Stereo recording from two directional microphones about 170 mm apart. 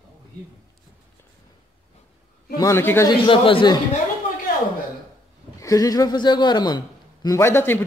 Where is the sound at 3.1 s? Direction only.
30° left (ahead or behind).